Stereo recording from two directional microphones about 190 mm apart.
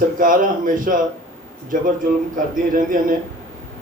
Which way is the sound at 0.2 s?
45° right (ahead or behind).